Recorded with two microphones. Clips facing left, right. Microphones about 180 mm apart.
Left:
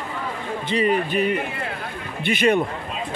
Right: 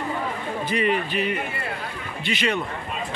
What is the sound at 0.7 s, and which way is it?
Speech, 40° left (ahead or behind).